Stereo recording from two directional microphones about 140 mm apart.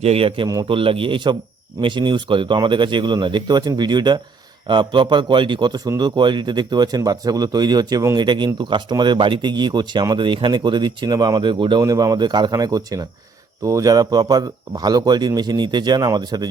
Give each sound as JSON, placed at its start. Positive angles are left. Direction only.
{"t": 0.0, "sound": "speech", "side_deg": -45}